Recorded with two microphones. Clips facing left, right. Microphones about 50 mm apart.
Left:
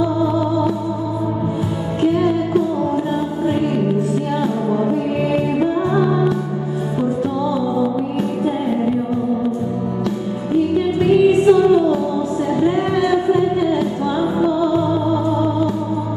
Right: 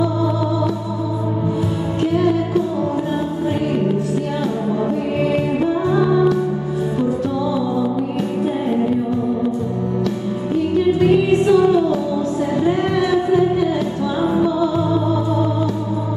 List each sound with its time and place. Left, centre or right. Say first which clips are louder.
2.0 s music: left 1 dB; centre
5.3 s music: left 2 dB; centre
11.0 s music: left 5 dB; centre